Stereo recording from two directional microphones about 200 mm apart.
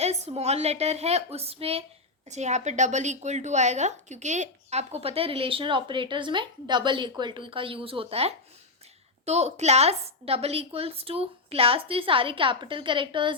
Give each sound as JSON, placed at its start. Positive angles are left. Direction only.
{"t": 0.0, "sound": "a woman's voice", "side_deg": -30}